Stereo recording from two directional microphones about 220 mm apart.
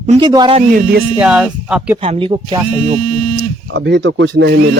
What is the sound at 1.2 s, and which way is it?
Speech, 5° right (ahead or behind).